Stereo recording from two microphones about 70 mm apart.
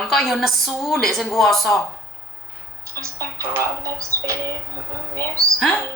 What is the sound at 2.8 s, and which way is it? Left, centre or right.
A woman's voice, right.